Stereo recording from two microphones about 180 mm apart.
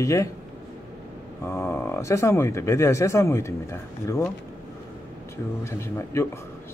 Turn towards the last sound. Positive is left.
turn(degrees=15)  # may be behind; listen again after turning